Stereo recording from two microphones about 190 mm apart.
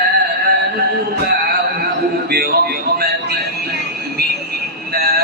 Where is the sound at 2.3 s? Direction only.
50° right (ahead or behind).